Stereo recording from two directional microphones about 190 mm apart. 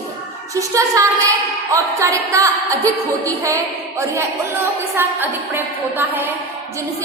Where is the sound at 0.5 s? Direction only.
15° right (ahead or behind).